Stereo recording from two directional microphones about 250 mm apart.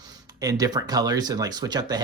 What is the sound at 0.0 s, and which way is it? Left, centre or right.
Speech, centre.